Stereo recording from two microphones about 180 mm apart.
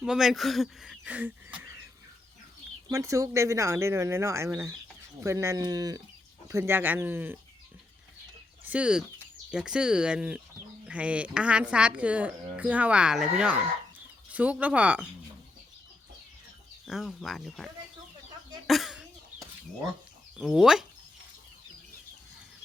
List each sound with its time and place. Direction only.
0.0 s speech: 5° right (ahead or behind)
2.9 s speech: 15° right (ahead or behind)
8.6 s speech: 5° right (ahead or behind)
16.8 s speech: centre (ahead or behind)
18.7 s cough: centre (ahead or behind)
20.4 s speech: centre (ahead or behind)